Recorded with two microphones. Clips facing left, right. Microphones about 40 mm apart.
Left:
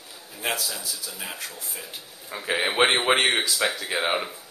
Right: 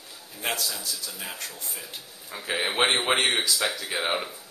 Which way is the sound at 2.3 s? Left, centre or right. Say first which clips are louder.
Left 3 dB; centre.